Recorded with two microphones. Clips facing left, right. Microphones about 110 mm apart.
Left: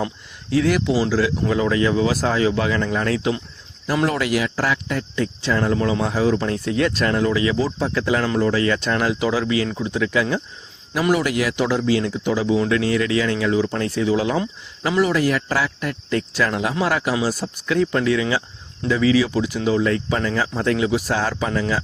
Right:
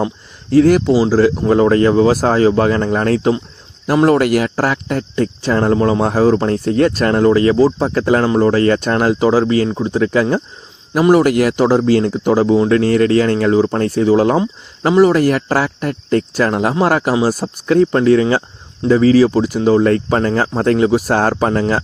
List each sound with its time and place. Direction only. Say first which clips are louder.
0.5 s speech: right 8 dB; 40° right (ahead or behind)